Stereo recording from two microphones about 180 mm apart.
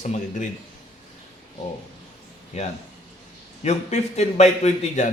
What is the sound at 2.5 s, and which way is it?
A man's voice, 40° left (ahead or behind).